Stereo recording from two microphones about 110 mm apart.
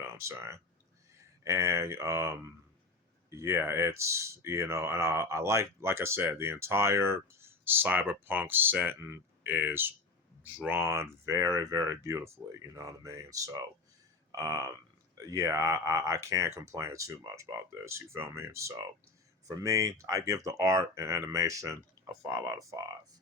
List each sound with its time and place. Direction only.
0.0 s speech: 25° right (ahead or behind)